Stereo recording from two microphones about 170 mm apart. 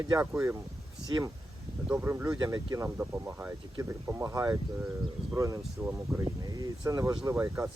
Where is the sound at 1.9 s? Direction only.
15° right (ahead or behind).